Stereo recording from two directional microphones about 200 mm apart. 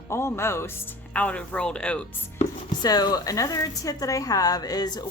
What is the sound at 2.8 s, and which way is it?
Speech, 20° left (ahead or behind).